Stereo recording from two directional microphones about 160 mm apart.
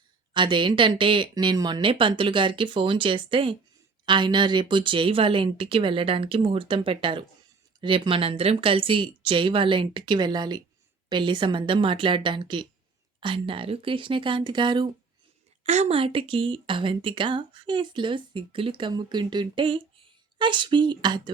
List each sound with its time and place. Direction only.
0.3 s speech: 30° right (ahead or behind)
15.6 s speech: 45° right (ahead or behind); by 21.3 s 25° right (ahead or behind)